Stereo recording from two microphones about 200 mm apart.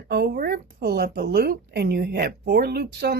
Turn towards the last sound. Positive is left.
turn(degrees=-55)  # may be behind; listen again after turning